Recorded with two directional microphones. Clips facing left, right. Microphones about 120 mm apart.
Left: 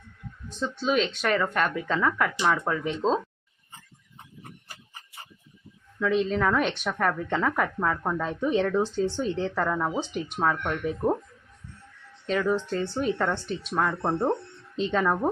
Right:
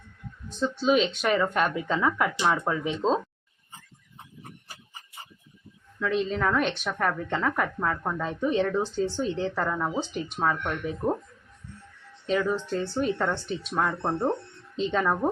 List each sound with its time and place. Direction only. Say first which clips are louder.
0.8 s speech: right 2 dB; 10° right (ahead or behind)
6.0 s a woman's voice: left 2 dB; centre (ahead or behind)
12.2 s a woman's voice: left 1 dB; 5° right (ahead or behind)